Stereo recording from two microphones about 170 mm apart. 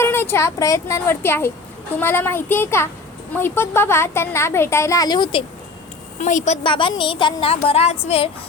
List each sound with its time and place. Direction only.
0.0 s a woman's voice: 15° left (ahead or behind)
6.1 s a woman's voice: 45° left (ahead or behind)
6.6 s a woman's voice: 30° left (ahead or behind)